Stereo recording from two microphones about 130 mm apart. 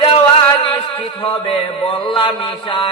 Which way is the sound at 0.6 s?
45° left (ahead or behind).